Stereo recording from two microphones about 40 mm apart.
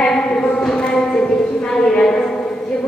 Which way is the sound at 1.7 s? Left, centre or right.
Centre.